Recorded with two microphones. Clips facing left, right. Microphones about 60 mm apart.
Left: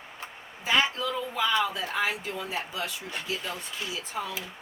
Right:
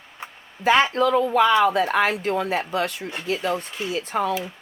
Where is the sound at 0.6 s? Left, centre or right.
Right.